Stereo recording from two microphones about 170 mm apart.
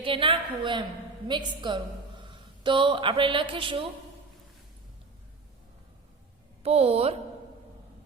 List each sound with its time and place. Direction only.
0.0 s a woman's voice: 30° right (ahead or behind)
6.6 s a woman's voice: 35° right (ahead or behind)